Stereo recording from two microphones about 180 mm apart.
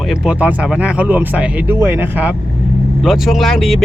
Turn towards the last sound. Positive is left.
turn(degrees=0)  # may be behind; listen again after turning